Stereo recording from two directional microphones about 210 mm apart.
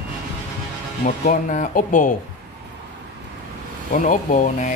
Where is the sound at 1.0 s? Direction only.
40° left (ahead or behind).